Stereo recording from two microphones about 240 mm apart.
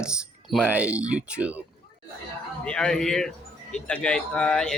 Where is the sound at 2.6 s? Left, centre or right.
Centre.